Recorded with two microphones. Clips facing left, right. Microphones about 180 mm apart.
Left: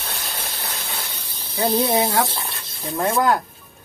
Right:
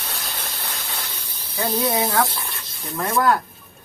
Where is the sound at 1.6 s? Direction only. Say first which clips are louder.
Left 3 dB; 30° left (ahead or behind).